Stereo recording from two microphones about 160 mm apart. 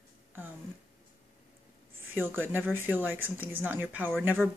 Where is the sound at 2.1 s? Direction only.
10° right (ahead or behind).